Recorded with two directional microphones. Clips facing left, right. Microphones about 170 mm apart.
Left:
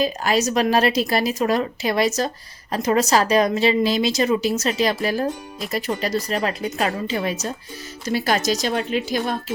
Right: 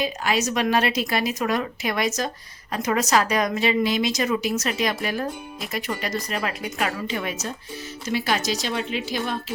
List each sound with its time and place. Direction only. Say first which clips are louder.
0.0 s a woman's voice: left 4 dB; 35° left (ahead or behind)